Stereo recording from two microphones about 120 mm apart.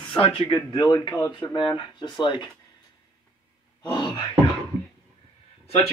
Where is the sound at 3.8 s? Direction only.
45° left (ahead or behind).